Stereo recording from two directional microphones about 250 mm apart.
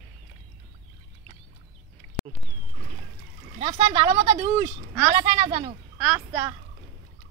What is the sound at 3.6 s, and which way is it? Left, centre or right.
A woman's voice, right.